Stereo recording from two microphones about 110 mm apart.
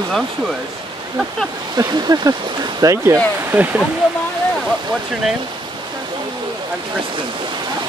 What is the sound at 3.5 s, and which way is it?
Speech, 15° right (ahead or behind).